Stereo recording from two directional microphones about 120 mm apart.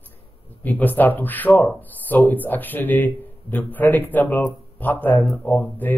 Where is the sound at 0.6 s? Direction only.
15° left (ahead or behind).